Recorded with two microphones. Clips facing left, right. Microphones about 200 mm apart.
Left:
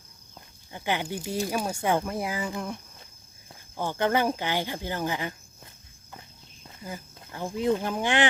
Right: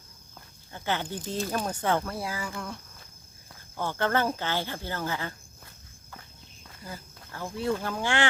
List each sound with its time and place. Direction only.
0.3 s speech: 15° left (ahead or behind)
6.6 s speech: 20° left (ahead or behind)